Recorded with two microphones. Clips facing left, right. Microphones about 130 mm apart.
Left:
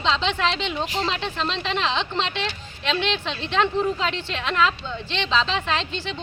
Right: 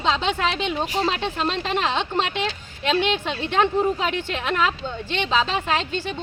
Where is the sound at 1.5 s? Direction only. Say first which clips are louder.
Right 1 dB; 50° right (ahead or behind).